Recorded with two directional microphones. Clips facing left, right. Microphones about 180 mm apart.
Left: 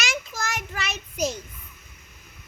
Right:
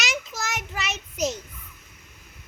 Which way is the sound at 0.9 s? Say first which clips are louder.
Even; 20° right (ahead or behind).